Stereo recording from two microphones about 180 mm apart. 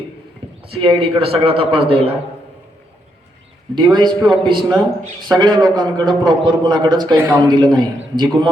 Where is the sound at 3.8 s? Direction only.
25° right (ahead or behind).